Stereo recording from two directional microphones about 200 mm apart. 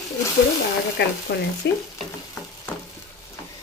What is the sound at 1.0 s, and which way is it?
Frying, 55° left (ahead or behind).